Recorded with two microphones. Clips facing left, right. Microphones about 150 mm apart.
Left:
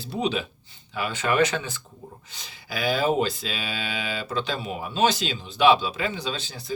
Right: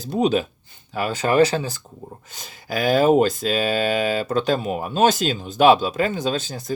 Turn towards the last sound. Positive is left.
turn(degrees=-45)  # may be behind; listen again after turning